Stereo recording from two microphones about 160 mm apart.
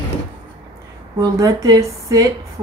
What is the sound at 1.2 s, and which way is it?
A woman's voice, 20° right (ahead or behind).